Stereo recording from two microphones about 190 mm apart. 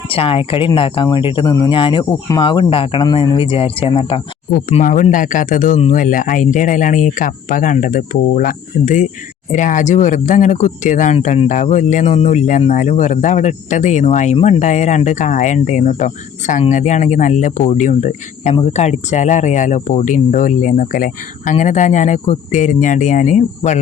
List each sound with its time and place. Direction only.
0.1 s speech: 30° left (ahead or behind)
4.5 s speech: 40° left (ahead or behind)